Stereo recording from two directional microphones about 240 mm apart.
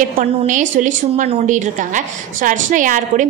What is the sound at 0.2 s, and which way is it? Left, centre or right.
A woman's voice, right.